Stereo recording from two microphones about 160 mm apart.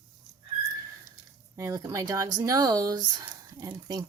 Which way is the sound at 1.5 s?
20° right (ahead or behind).